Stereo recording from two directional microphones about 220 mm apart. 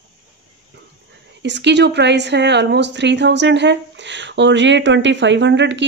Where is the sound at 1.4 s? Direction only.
50° right (ahead or behind).